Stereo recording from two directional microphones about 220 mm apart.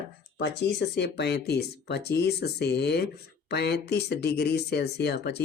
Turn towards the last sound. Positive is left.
turn(degrees=45)  # may be behind; listen again after turning